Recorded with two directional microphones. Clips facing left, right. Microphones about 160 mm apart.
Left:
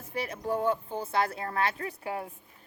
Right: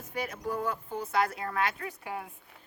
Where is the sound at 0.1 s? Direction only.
30° left (ahead or behind).